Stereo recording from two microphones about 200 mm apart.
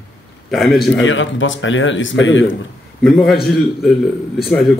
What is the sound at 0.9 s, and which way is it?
Speech, 70° left (ahead or behind).